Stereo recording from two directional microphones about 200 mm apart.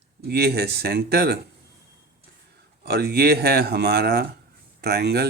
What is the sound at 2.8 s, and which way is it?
Speech, 55° right (ahead or behind).